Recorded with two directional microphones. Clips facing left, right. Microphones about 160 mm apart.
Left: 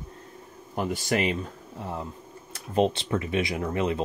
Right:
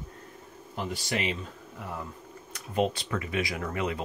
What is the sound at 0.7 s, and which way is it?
Speech, 45° left (ahead or behind).